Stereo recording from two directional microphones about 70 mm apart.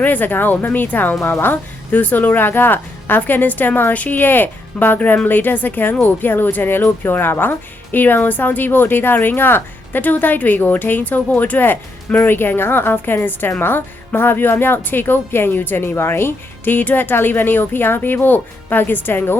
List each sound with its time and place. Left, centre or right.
0.0 s speech: left